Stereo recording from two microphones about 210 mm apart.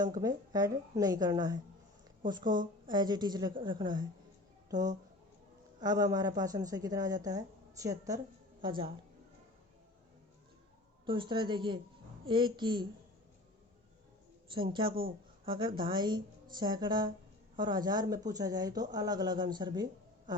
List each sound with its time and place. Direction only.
0.0 s a woman's voice: 20° right (ahead or behind)
11.0 s speech: 25° right (ahead or behind)
14.5 s speech: 25° right (ahead or behind)